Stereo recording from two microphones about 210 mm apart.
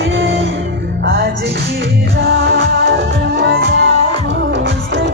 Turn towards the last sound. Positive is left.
turn(degrees=-60)  # may be behind; listen again after turning